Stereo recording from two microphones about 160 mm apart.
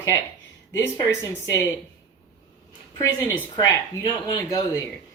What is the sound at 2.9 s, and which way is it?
Speech, 20° left (ahead or behind).